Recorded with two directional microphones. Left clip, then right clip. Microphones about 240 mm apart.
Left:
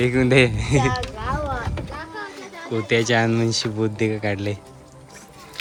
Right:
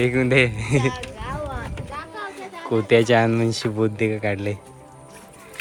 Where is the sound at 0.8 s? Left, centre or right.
Left.